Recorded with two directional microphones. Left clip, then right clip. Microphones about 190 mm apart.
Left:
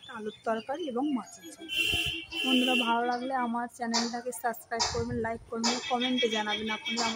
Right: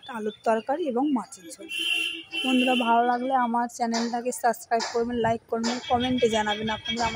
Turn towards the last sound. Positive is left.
turn(degrees=-20)  # may be behind; listen again after turning